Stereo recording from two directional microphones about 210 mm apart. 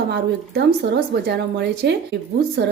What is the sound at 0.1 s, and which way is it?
Speech, 50° right (ahead or behind).